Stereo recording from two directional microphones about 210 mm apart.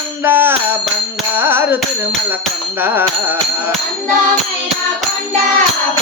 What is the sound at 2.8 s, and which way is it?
Music, 10° right (ahead or behind).